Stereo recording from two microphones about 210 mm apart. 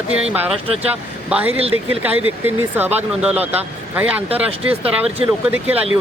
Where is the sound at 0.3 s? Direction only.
30° right (ahead or behind).